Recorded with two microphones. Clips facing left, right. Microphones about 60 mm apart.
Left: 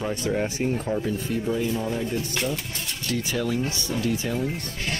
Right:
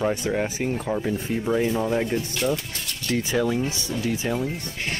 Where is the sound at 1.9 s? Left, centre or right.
Right.